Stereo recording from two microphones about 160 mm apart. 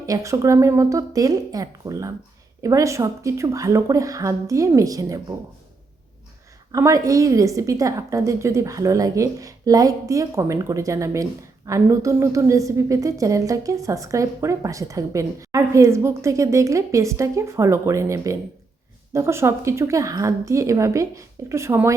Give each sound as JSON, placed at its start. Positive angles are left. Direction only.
{"t": 0.0, "sound": "a woman's voice", "side_deg": -20}
{"t": 6.7, "sound": "a woman's voice", "side_deg": -20}